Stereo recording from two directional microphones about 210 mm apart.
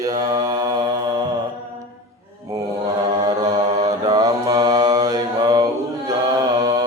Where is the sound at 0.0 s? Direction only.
15° right (ahead or behind).